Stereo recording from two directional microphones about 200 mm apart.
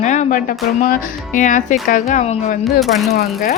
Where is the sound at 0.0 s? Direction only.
35° left (ahead or behind).